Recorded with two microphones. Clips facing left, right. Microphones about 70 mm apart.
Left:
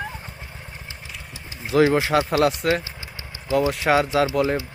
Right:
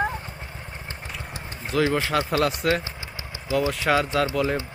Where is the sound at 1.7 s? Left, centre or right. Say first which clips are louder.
Left 5 dB; left.